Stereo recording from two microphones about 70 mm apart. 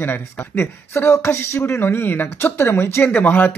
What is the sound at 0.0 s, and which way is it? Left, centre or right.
Speech, left.